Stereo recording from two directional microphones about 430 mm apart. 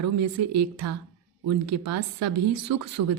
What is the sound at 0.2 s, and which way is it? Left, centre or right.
Speech, right.